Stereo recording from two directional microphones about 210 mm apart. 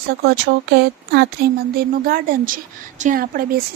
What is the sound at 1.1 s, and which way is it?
A woman's voice, 50° right (ahead or behind).